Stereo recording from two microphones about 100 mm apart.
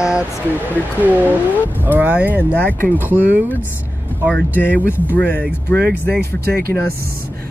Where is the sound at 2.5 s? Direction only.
20° left (ahead or behind).